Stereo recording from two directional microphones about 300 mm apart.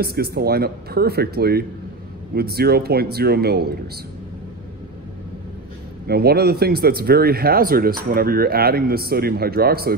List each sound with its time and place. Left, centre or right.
0.0 s speech: right
6.0 s speech: right